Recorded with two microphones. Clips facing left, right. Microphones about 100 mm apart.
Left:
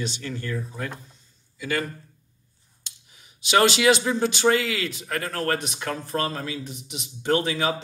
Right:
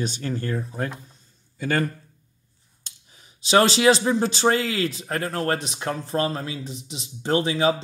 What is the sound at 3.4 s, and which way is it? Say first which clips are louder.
Speech: right 2 dB; 30° right (ahead or behind).